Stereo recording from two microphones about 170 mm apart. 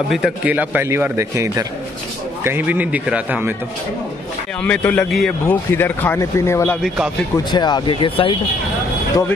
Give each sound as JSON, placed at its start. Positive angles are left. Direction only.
{"t": 0.1, "sound": "a man's voice", "side_deg": -5}
{"t": 4.6, "sound": "a man's voice", "side_deg": 10}
{"t": 7.5, "sound": "speech", "side_deg": 25}